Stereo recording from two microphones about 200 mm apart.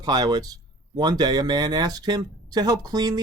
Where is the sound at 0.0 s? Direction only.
20° right (ahead or behind).